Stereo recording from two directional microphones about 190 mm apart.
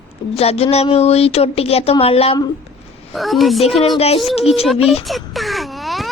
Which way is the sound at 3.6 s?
35° left (ahead or behind).